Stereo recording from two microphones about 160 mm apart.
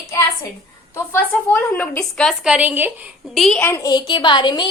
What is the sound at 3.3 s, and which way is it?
Speech, centre (ahead or behind).